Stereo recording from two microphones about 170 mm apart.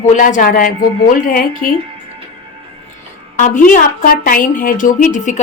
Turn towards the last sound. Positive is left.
turn(degrees=50)  # may be behind; listen again after turning